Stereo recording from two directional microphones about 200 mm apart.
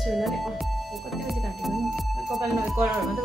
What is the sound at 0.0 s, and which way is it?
Speech, centre (ahead or behind).